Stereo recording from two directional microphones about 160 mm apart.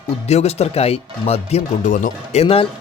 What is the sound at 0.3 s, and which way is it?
Speech, 40° left (ahead or behind).